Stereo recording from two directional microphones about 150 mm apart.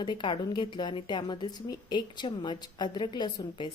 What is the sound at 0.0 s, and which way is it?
A woman's voice, 30° left (ahead or behind).